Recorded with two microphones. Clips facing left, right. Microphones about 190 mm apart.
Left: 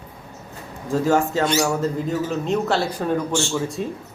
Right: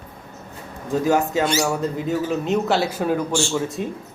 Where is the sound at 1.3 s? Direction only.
5° right (ahead or behind).